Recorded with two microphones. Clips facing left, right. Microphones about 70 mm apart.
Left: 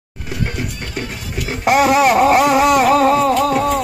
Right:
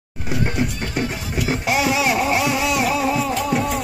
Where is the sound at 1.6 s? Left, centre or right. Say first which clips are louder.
Left 9 dB; left.